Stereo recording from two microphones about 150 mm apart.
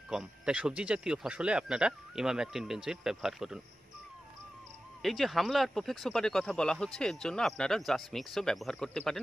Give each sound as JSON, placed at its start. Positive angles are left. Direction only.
{"t": 0.1, "sound": "speech", "side_deg": -5}
{"t": 5.0, "sound": "speech", "side_deg": 0}